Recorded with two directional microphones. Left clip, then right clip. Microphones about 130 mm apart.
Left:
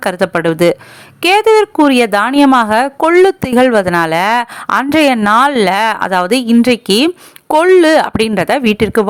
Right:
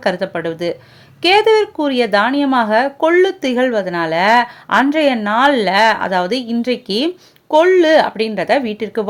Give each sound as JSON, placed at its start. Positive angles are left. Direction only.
{"t": 0.0, "sound": "speech", "side_deg": 45}